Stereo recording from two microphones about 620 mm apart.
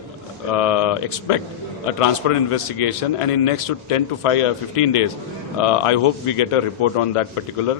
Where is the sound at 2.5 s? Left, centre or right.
Left.